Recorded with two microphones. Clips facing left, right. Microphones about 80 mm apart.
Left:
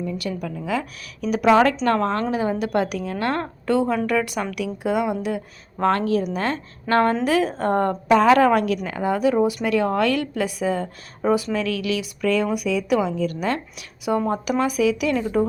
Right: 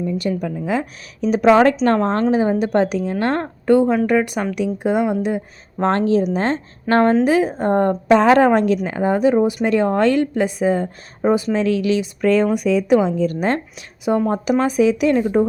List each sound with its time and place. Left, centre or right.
0.0 s a woman's voice: right